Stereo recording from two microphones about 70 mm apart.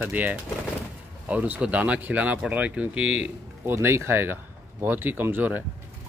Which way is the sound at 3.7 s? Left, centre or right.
Right.